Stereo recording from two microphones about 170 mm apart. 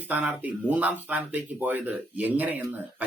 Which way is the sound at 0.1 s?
10° right (ahead or behind).